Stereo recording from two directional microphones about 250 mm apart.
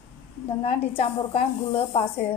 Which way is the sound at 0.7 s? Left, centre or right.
Left.